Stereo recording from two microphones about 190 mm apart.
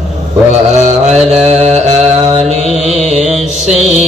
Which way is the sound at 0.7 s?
35° right (ahead or behind).